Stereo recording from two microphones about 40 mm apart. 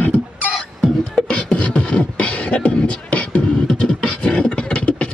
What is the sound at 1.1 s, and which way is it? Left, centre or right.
Beatboxing, left.